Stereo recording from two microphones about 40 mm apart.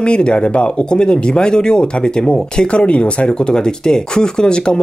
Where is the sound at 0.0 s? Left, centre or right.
Left.